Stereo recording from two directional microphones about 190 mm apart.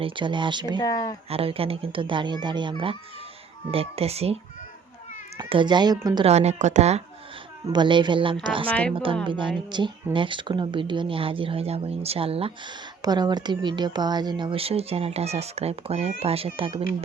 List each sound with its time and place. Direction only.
0.0 s speech: 25° right (ahead or behind)
0.8 s speech: 20° left (ahead or behind)
1.3 s speech: 30° right (ahead or behind)
5.4 s speech: 25° right (ahead or behind)
6.2 s speech: 35° right (ahead or behind)
7.7 s speech: 25° right (ahead or behind)